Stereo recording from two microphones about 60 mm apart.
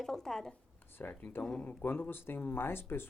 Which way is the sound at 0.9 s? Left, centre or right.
Left.